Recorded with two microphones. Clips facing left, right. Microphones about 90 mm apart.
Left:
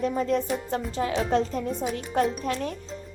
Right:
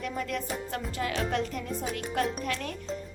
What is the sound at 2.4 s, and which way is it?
Music, 30° left (ahead or behind).